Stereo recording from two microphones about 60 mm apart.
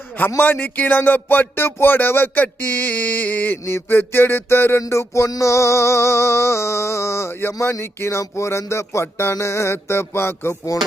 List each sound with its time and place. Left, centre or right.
0.3 s speech: left
3.7 s speech: left
4.9 s a sound: left